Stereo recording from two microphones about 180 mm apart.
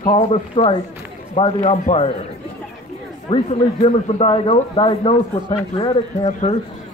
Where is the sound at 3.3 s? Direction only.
30° left (ahead or behind).